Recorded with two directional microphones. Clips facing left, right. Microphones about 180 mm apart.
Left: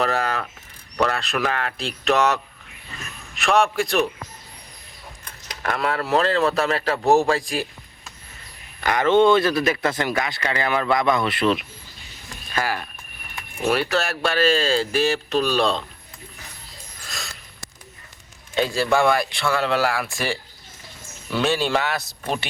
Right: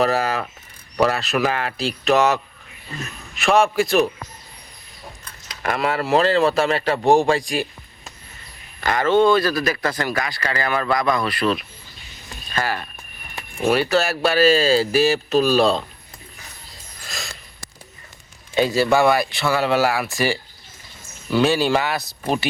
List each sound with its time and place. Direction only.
0.0 s speech: 5° right (ahead or behind)
5.6 s speech: 5° right (ahead or behind)
8.8 s speech: 15° left (ahead or behind)
12.5 s speech: 10° left (ahead or behind)
13.9 s speech: 5° right (ahead or behind)
18.7 s speech: 5° right (ahead or behind)